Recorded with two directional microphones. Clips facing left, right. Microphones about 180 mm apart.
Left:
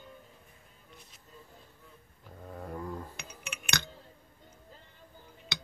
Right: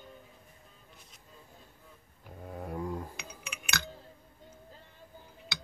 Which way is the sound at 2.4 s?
10° right (ahead or behind).